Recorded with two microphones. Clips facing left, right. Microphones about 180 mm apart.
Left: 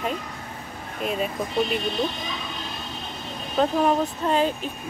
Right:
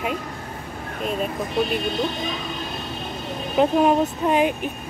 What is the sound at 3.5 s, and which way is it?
Speech, 15° right (ahead or behind).